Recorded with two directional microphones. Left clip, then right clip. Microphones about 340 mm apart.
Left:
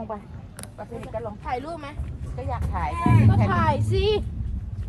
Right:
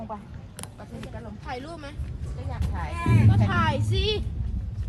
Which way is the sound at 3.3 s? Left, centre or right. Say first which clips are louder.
Left 3 dB; left.